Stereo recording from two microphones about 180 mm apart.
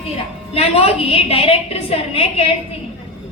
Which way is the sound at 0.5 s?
35° left (ahead or behind).